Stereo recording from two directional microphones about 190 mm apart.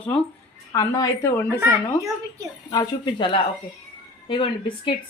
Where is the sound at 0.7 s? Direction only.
20° left (ahead or behind).